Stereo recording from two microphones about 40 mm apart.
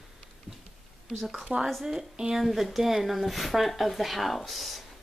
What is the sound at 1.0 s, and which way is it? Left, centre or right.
Speech, centre.